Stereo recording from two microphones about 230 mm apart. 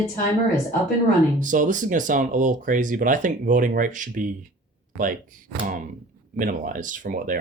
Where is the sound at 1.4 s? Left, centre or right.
Right.